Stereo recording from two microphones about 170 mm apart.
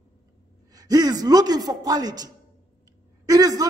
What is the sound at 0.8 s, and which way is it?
A man's voice, 20° right (ahead or behind).